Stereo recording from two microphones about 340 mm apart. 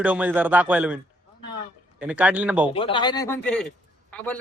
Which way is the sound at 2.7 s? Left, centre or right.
Centre.